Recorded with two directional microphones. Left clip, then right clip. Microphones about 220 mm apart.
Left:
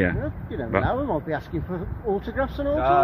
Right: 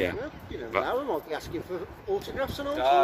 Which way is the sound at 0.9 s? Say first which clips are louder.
Left 4 dB; 40° left (ahead or behind).